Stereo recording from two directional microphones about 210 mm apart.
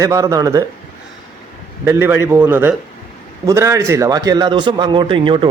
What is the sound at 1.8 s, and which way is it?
A man's voice, 10° right (ahead or behind).